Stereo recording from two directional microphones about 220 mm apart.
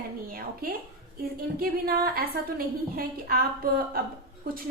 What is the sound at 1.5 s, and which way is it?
A woman's voice, 40° right (ahead or behind).